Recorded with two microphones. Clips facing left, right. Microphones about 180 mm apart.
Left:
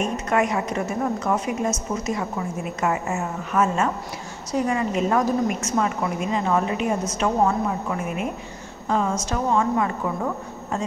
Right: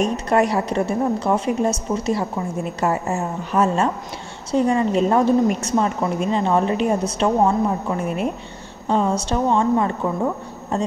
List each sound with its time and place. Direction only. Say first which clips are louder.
0.0 s a woman's voice: right 4 dB; 35° right (ahead or behind)